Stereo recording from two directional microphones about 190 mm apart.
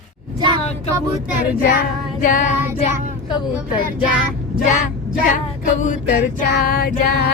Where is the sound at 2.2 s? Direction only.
45° left (ahead or behind).